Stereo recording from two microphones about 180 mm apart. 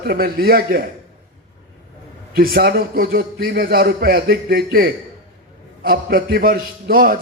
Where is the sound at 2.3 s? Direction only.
55° right (ahead or behind).